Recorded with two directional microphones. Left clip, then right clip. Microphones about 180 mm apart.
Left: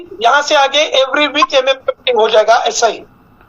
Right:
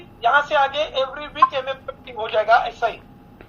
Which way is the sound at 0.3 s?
70° left (ahead or behind).